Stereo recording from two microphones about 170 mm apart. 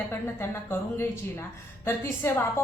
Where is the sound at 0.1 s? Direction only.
15° left (ahead or behind).